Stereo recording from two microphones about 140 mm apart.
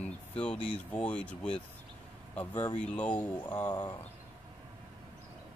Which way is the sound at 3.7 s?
30° left (ahead or behind).